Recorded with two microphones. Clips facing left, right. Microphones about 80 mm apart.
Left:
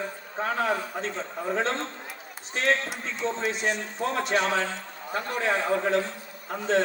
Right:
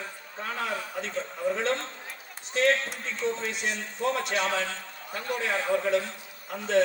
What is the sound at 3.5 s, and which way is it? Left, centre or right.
A man's voice, left.